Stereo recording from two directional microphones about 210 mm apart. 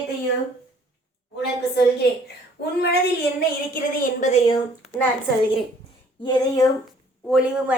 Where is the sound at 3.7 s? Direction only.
35° left (ahead or behind).